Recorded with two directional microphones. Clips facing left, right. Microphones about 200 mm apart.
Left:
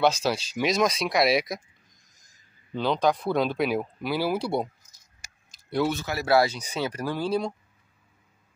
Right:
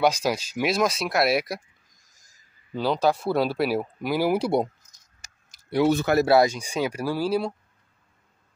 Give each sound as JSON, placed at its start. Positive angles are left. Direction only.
{"t": 0.0, "sound": "speech", "side_deg": -10}
{"t": 2.7, "sound": "speech", "side_deg": -5}
{"t": 5.2, "sound": "a sound", "side_deg": 10}
{"t": 5.9, "sound": "speech", "side_deg": -50}
{"t": 6.5, "sound": "speech", "side_deg": -10}